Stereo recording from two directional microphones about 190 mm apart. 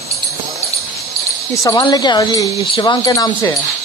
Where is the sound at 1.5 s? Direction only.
20° left (ahead or behind).